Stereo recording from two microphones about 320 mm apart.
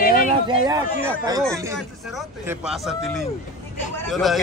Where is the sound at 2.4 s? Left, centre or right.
Centre.